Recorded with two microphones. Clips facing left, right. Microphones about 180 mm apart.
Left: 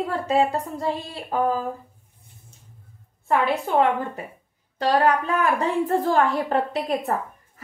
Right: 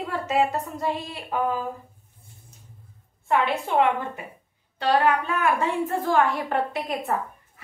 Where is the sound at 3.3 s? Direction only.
40° left (ahead or behind).